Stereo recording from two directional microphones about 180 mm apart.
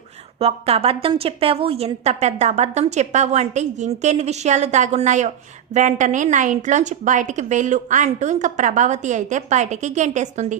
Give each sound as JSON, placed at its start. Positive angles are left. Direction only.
{"t": 0.3, "sound": "a woman's voice", "side_deg": -35}